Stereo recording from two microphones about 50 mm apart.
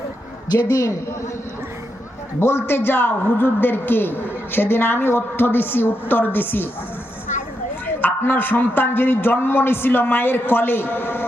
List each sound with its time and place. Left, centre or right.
2.4 s a man's voice: left
8.0 s a man's voice: left